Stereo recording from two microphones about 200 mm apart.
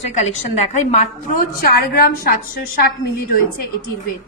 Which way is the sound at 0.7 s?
40° left (ahead or behind).